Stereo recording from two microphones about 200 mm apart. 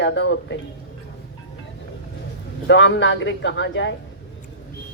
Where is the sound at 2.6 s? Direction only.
65° left (ahead or behind).